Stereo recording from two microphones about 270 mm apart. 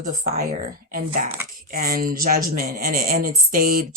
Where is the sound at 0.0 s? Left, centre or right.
Right.